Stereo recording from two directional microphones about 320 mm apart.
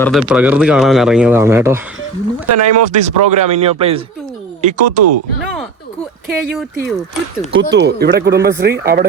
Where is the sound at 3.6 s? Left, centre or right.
Centre.